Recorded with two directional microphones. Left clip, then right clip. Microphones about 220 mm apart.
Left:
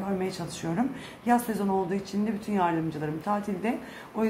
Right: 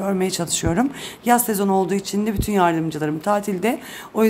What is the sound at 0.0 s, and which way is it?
Speech, 50° right (ahead or behind).